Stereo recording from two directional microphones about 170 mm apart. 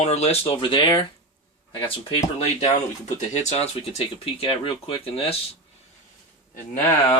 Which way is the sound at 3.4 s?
40° left (ahead or behind).